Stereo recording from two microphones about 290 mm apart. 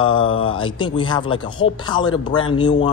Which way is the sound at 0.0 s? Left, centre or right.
Centre.